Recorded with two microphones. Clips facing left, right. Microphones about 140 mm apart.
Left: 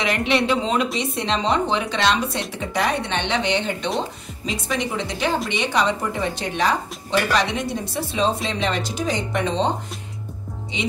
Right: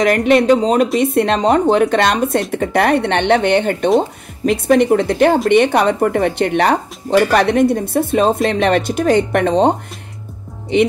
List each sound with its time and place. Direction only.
0.0 s speech: 45° right (ahead or behind)
0.9 s speech: 55° right (ahead or behind)